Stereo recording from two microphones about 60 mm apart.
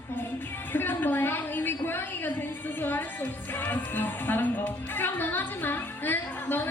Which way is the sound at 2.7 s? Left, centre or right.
Left.